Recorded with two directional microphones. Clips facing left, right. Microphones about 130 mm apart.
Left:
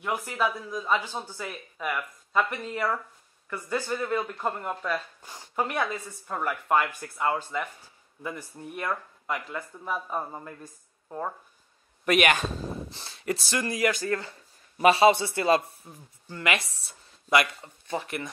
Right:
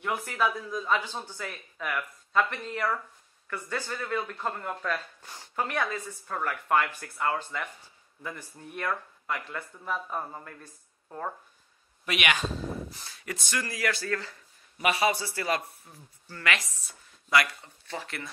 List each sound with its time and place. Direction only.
0.0 s speech: 10° left (ahead or behind)
12.0 s a man's voice: 45° left (ahead or behind)
12.9 s speech: 30° left (ahead or behind)